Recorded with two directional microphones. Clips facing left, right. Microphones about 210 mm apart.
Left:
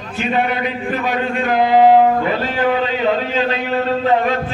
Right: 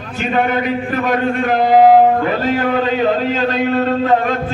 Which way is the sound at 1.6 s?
45° right (ahead or behind).